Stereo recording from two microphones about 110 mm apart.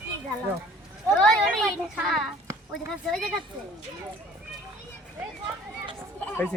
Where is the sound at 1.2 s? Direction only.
5° left (ahead or behind).